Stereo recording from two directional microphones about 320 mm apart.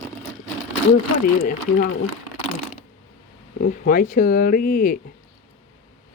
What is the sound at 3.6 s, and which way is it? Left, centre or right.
Speech, left.